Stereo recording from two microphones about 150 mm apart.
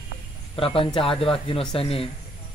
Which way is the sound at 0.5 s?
40° left (ahead or behind).